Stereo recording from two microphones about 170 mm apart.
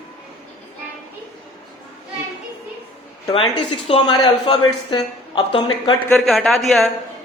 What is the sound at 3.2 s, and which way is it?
A woman's voice, 25° left (ahead or behind).